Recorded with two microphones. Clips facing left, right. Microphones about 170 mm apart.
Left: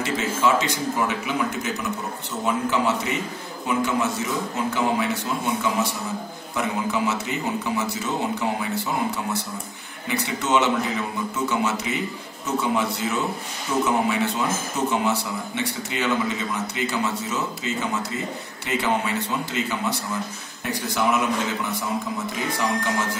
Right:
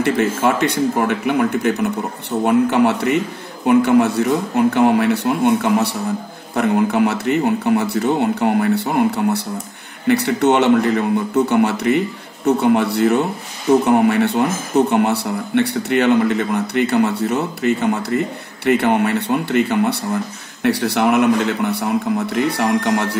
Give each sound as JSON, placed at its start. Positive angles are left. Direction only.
{"t": 0.0, "sound": "a man's voice", "side_deg": -60}